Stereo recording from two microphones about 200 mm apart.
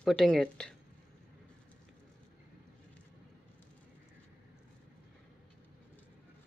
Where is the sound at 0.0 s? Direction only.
Centre (ahead or behind).